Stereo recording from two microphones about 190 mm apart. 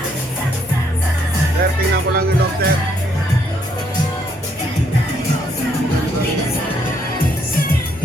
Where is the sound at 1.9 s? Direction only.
55° right (ahead or behind).